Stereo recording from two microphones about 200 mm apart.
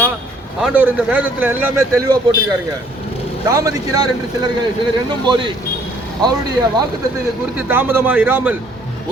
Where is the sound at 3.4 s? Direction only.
15° right (ahead or behind).